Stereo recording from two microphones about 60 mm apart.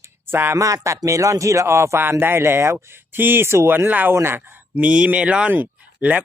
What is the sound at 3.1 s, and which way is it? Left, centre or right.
Speech, right.